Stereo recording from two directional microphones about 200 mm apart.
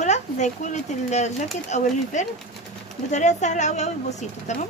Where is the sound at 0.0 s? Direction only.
35° left (ahead or behind).